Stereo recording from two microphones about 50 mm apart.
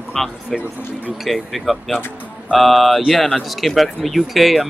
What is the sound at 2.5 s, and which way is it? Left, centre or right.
Speech, centre.